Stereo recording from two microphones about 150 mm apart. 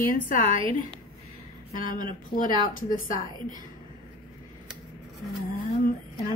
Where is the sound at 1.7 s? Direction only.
65° left (ahead or behind).